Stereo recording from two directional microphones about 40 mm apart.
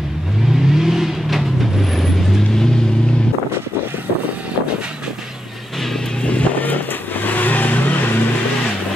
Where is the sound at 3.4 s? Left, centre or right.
Right.